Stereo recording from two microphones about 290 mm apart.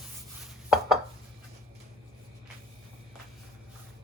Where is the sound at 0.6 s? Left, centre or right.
Centre.